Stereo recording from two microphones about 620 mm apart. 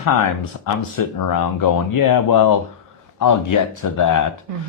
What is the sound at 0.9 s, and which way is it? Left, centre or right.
Speech, left.